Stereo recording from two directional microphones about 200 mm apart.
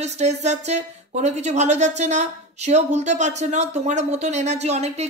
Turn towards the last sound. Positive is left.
turn(degrees=-35)  # may be behind; listen again after turning